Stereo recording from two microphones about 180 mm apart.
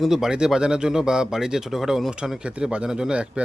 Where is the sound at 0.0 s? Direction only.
Centre (ahead or behind).